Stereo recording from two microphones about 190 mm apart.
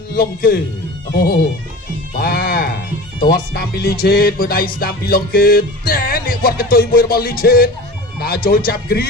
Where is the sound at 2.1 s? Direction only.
50° left (ahead or behind).